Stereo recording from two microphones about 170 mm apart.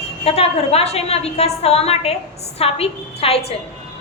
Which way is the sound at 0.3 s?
35° left (ahead or behind).